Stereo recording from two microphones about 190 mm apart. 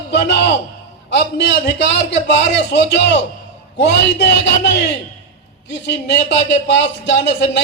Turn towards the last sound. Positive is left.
turn(degrees=65)  # may be behind; listen again after turning